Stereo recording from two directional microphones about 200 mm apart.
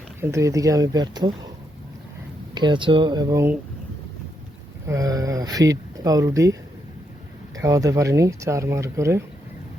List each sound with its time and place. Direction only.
0.2 s speech: 15° right (ahead or behind)
2.6 s speech: 25° right (ahead or behind)
4.9 s speech: 15° right (ahead or behind)